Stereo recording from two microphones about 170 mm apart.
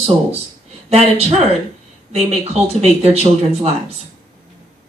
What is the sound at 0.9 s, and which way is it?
Speech, 35° right (ahead or behind).